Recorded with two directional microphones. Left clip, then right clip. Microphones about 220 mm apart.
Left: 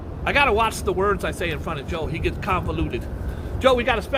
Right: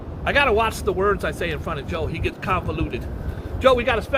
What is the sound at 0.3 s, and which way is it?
Speech, 20° left (ahead or behind).